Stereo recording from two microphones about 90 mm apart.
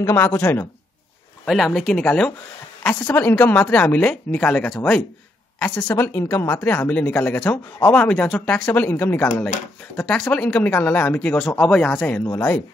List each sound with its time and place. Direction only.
0.0 s speech: 30° left (ahead or behind)
1.4 s speech: centre (ahead or behind)
2.0 s a woman's voice: 15° left (ahead or behind)
9.9 s speech: 5° left (ahead or behind)
11.1 s speech: 10° left (ahead or behind)
12.3 s speech: 30° left (ahead or behind)